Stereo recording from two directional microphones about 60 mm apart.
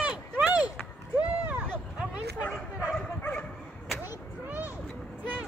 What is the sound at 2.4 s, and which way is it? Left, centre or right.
Bow-wow, centre.